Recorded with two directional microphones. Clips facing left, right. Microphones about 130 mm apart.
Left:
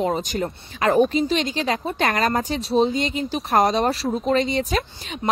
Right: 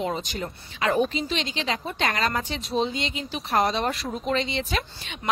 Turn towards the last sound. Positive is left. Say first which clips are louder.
# left 6 dB
turn(degrees=40)  # may be behind; listen again after turning